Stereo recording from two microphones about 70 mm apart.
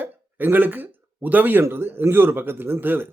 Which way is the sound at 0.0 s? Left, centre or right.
Right.